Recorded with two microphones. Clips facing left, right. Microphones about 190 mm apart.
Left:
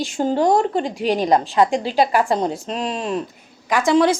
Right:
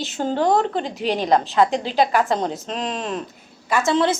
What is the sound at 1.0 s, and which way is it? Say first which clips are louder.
Speech: left 3 dB; 40° left (ahead or behind).